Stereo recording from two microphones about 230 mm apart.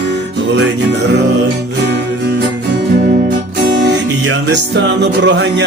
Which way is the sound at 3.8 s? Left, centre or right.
Right.